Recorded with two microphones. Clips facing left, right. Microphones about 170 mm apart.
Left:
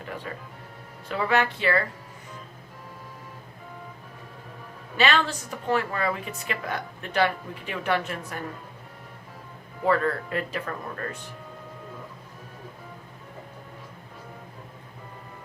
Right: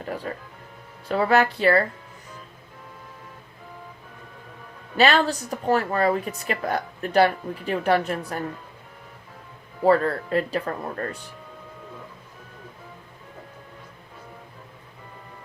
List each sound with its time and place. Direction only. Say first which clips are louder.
0.3 s speech: right 4 dB; 40° right (ahead or behind)
4.9 s speech: right 4 dB; 40° right (ahead or behind)
9.8 s speech: right 4 dB; 35° right (ahead or behind)